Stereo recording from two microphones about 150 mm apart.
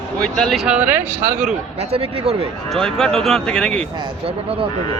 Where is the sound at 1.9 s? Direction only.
40° right (ahead or behind).